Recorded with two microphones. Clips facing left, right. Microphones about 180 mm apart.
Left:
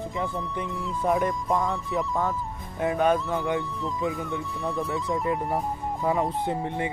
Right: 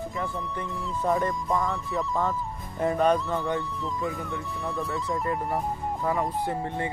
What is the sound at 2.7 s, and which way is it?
Speech, centre (ahead or behind).